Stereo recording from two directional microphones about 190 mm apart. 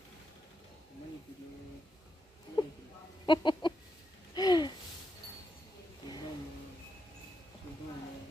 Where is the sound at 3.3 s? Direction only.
25° left (ahead or behind).